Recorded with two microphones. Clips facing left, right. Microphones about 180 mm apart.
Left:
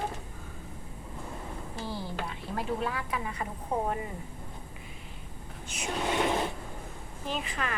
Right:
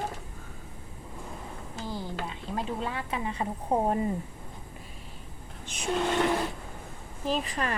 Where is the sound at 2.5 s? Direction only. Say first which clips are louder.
Left 1 dB; 25° right (ahead or behind).